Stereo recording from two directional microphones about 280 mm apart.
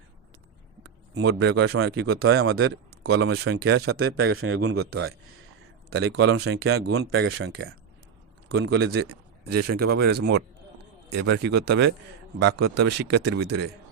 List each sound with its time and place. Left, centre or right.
1.1 s speech: right
5.9 s speech: right
9.5 s speech: right
9.7 s speech: right